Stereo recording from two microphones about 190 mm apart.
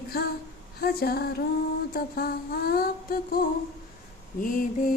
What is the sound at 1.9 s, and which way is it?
Mantra, 50° left (ahead or behind).